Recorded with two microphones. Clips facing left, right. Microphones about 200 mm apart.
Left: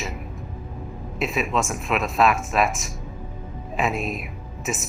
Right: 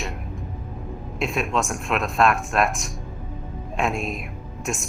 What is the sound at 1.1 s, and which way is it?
Speech, centre (ahead or behind).